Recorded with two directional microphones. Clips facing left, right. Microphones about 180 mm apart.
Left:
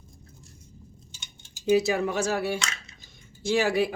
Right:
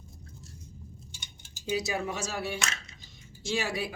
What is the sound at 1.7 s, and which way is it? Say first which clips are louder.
Speech: left 9 dB; 60° left (ahead or behind).